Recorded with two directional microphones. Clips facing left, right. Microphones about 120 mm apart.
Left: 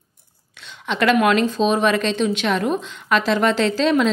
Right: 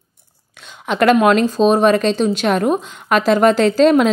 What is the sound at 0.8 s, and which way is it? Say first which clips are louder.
A woman's voice: right 4 dB; 45° right (ahead or behind).